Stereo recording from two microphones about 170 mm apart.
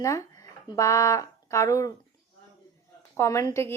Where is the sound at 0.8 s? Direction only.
20° left (ahead or behind).